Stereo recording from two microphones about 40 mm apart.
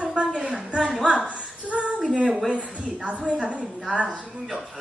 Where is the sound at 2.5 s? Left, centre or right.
Right.